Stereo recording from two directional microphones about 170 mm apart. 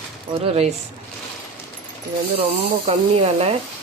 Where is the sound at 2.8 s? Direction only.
40° right (ahead or behind).